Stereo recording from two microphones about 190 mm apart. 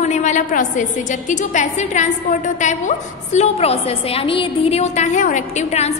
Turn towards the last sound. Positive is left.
turn(degrees=35)  # may be behind; listen again after turning